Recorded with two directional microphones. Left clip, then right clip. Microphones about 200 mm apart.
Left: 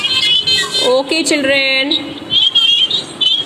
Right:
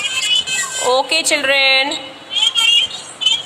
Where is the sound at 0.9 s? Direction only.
35° right (ahead or behind).